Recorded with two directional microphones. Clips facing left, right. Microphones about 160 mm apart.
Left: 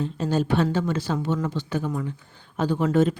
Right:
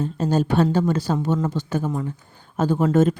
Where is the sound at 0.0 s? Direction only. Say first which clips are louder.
Right 3 dB; 45° right (ahead or behind).